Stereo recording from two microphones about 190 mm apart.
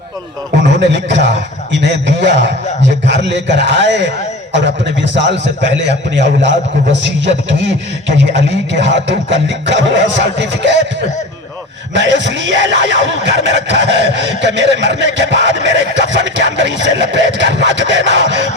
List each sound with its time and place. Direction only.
0.7 s a man's voice: 65° right (ahead or behind)
11.9 s speech: 70° right (ahead or behind)